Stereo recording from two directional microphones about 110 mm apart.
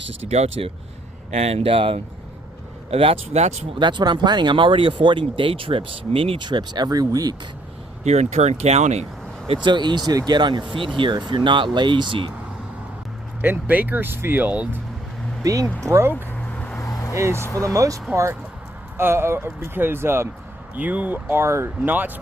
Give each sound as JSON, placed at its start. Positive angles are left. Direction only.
{"t": 0.3, "sound": "speech", "side_deg": -75}
{"t": 1.3, "sound": "speech", "side_deg": -80}
{"t": 3.8, "sound": "speech", "side_deg": -45}
{"t": 6.5, "sound": "speech", "side_deg": -40}
{"t": 8.0, "sound": "speech", "side_deg": -85}
{"t": 9.6, "sound": "speech", "side_deg": -45}
{"t": 13.4, "sound": "speech", "side_deg": -15}
{"t": 15.4, "sound": "speech", "side_deg": -30}
{"t": 16.5, "sound": "vehicle", "side_deg": 10}
{"t": 16.8, "sound": "vehicle", "side_deg": 30}
{"t": 17.2, "sound": "speech", "side_deg": -25}